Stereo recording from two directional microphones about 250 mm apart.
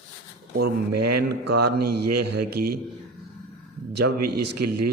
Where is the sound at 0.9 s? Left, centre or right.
Right.